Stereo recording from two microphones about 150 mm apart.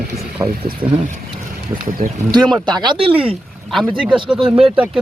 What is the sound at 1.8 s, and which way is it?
Speech, 65° right (ahead or behind).